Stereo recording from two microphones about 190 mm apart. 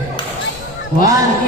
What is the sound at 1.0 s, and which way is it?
Speech, 20° right (ahead or behind).